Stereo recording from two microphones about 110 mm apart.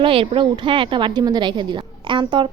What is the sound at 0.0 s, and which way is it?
A woman's voice, 55° right (ahead or behind).